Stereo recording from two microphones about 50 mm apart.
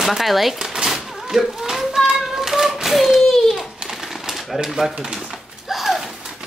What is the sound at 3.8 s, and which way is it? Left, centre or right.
Bird, centre.